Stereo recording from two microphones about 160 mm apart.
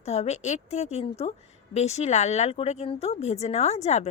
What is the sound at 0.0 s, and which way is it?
A woman's voice, 40° left (ahead or behind).